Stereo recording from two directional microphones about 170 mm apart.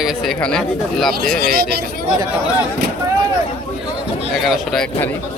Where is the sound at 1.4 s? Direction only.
65° right (ahead or behind).